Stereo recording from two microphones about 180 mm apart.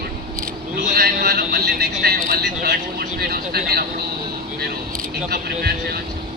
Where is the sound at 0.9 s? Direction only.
60° right (ahead or behind).